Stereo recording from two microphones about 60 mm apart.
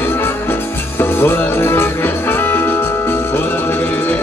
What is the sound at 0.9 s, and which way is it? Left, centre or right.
Music, left.